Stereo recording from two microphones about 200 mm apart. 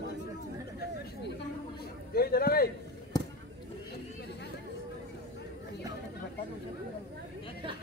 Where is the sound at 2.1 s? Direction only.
50° left (ahead or behind).